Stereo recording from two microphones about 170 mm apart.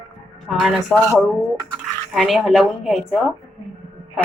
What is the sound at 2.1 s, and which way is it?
Speech, centre (ahead or behind).